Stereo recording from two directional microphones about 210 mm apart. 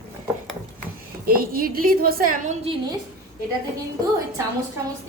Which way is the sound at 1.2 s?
45° right (ahead or behind).